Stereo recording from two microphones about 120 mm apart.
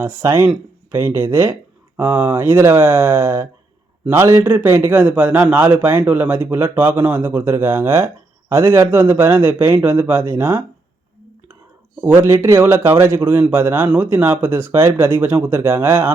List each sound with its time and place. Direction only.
0.0 s a man's voice: 20° right (ahead or behind)
12.0 s a man's voice: 20° right (ahead or behind)